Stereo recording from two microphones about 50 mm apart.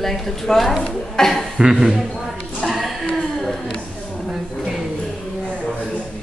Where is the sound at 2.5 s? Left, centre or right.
Centre.